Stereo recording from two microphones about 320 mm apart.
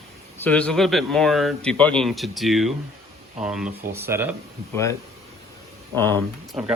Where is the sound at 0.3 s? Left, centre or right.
Centre.